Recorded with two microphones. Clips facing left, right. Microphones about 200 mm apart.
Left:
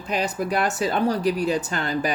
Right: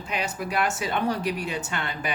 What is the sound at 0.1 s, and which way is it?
Speech, 35° left (ahead or behind).